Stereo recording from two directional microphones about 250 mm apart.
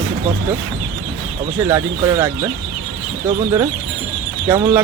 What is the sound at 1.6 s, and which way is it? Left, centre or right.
Speech, centre.